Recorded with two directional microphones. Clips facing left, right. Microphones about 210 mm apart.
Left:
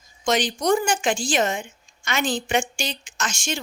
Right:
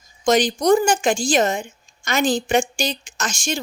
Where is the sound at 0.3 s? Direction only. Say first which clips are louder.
Right 5 dB; 40° right (ahead or behind).